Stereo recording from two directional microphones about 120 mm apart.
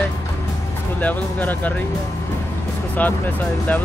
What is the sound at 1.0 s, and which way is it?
Speech, 15° left (ahead or behind).